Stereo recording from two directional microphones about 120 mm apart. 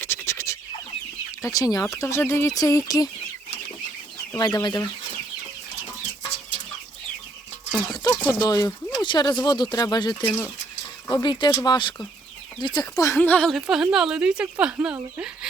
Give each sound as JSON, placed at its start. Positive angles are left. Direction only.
{"t": 0.0, "sound": "bird", "side_deg": 20}
{"t": 1.4, "sound": "speech", "side_deg": 30}
{"t": 4.4, "sound": "speech", "side_deg": 35}
{"t": 7.9, "sound": "a sound", "side_deg": 35}
{"t": 8.2, "sound": "speech", "side_deg": 20}
{"t": 10.2, "sound": "speech", "side_deg": 15}
{"t": 11.1, "sound": "speech", "side_deg": 40}
{"t": 13.1, "sound": "speech", "side_deg": 15}
{"t": 13.5, "sound": "speech", "side_deg": -5}